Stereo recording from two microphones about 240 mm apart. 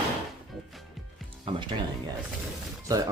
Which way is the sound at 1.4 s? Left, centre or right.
Right.